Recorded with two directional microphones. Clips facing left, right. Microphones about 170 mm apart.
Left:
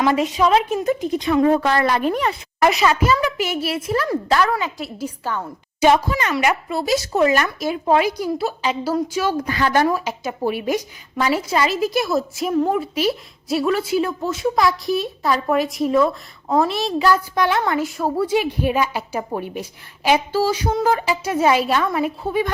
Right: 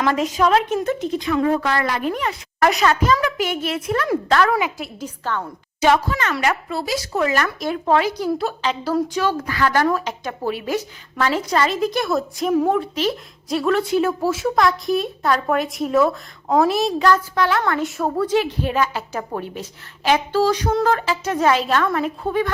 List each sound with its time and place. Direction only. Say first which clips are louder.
0.0 s a woman's voice: left 1 dB; 5° left (ahead or behind)
1.2 s a woman's voice: left 4 dB; 25° left (ahead or behind)
2.6 s a woman's voice: even; 5° left (ahead or behind)
7.6 s a woman's voice: even; 10° left (ahead or behind)
17.7 s a woman's voice: left 1 dB; centre (ahead or behind)